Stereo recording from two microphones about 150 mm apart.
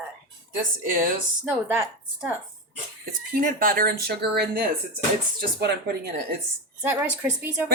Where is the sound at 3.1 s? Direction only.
70° right (ahead or behind); by 5.7 s 90° right.